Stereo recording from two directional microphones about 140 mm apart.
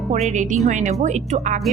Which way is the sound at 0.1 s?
55° right (ahead or behind).